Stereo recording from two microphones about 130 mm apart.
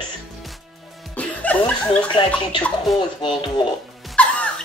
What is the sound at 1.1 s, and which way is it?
Speech, 10° left (ahead or behind).